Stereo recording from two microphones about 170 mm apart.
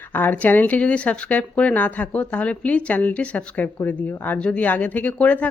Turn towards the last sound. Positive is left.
turn(degrees=10)  # may be behind; listen again after turning